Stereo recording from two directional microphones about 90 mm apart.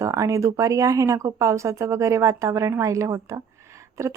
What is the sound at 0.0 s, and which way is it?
A woman's voice, 35° right (ahead or behind).